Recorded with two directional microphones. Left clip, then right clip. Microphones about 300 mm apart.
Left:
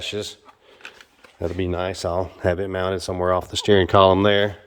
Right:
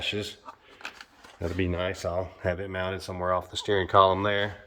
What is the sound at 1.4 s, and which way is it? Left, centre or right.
Speech, centre.